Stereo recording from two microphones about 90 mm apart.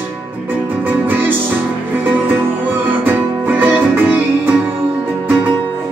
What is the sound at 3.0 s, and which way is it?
Music, 20° right (ahead or behind).